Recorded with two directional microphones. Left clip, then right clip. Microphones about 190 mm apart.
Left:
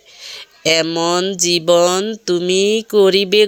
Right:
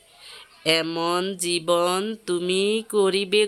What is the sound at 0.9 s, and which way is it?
Speech, 20° left (ahead or behind).